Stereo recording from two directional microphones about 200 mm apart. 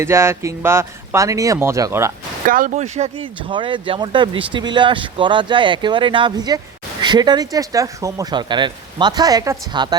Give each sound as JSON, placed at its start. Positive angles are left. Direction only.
{"t": 0.0, "sound": "speech", "side_deg": -15}
{"t": 2.5, "sound": "speech", "side_deg": -40}